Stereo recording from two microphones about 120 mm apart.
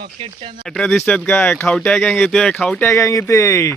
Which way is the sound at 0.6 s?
5° left (ahead or behind).